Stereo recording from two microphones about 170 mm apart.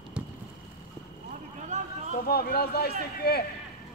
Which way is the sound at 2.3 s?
65° left (ahead or behind).